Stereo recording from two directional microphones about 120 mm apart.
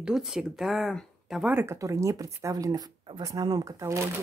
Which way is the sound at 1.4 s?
20° right (ahead or behind).